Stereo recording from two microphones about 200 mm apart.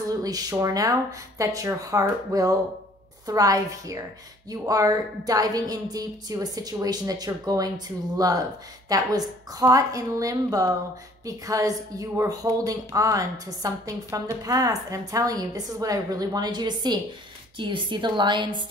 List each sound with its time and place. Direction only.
0.1 s a woman's voice: 20° right (ahead or behind)